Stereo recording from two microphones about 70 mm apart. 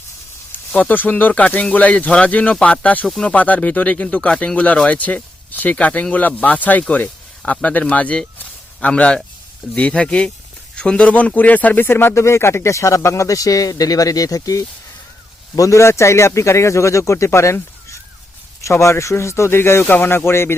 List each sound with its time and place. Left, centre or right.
0.7 s a man's voice: left